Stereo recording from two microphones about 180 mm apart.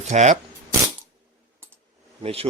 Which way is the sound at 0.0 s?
40° right (ahead or behind).